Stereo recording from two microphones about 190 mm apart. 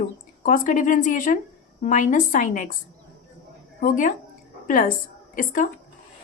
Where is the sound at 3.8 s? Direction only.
45° left (ahead or behind).